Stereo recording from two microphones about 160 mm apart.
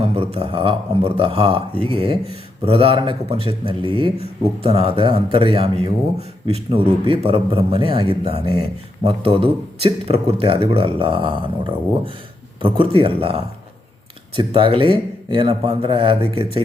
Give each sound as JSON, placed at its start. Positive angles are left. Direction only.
{"t": 0.0, "sound": "speech", "side_deg": -35}
{"t": 9.0, "sound": "speech", "side_deg": -35}